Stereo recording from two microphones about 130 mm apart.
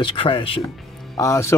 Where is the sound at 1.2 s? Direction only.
20° left (ahead or behind).